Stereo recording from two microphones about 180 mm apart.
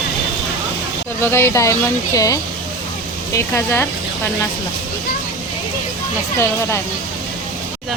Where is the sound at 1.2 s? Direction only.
15° left (ahead or behind).